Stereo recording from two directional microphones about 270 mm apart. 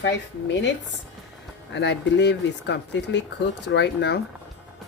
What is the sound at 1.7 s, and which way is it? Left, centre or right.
Speech, left.